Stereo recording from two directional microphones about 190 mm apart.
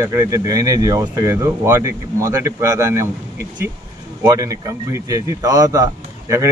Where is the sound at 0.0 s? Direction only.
15° right (ahead or behind).